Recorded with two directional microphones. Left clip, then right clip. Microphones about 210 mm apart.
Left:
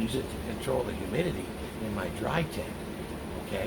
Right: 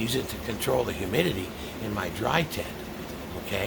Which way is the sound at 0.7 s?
45° right (ahead or behind).